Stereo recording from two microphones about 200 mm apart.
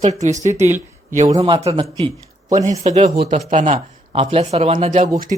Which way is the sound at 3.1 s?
50° right (ahead or behind).